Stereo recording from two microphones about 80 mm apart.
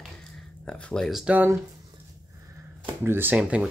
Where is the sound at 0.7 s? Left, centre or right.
Centre.